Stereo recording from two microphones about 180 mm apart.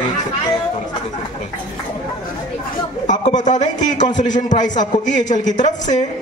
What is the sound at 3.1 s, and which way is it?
Speech, 45° left (ahead or behind).